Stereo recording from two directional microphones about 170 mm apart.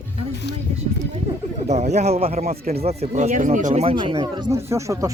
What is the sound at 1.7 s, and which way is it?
Speech, 40° right (ahead or behind).